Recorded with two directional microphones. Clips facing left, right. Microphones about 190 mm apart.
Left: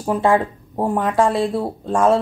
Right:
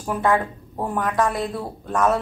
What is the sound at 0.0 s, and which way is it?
A woman's voice, 25° left (ahead or behind).